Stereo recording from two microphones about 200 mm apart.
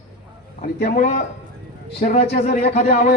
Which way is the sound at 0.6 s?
40° left (ahead or behind).